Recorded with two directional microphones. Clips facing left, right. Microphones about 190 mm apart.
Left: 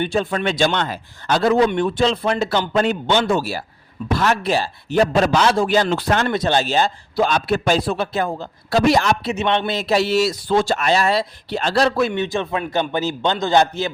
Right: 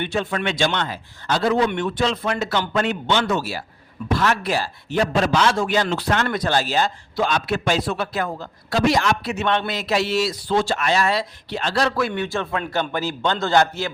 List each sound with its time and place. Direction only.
0.0 s a man's voice: 35° left (ahead or behind)
1.7 s a man's voice: 30° left (ahead or behind)
4.9 s a man's voice: 40° left (ahead or behind)
5.9 s speech: 45° left (ahead or behind)
6.2 s a man's voice: 25° left (ahead or behind)
7.3 s a man's voice: 40° left (ahead or behind)
8.7 s a man's voice: 40° left (ahead or behind)
9.2 s a man's voice: 20° left (ahead or behind)